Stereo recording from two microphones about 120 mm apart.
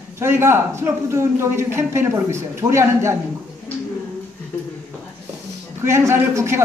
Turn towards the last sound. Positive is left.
turn(degrees=-20)  # may be behind; listen again after turning